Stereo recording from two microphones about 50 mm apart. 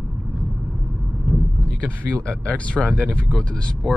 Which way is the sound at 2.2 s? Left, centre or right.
Left.